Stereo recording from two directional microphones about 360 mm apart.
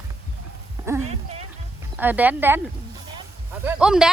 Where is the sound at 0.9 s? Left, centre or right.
Centre.